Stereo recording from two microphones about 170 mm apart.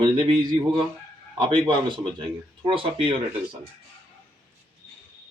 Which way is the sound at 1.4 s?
30° right (ahead or behind).